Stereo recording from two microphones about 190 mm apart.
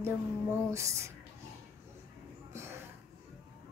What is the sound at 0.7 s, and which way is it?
Speech, 15° right (ahead or behind).